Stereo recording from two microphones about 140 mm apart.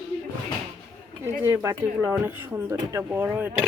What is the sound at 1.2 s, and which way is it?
Speech, 15° right (ahead or behind).